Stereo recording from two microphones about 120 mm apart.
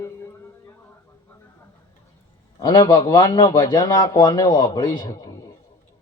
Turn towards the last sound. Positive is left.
turn(degrees=30)  # may be behind; listen again after turning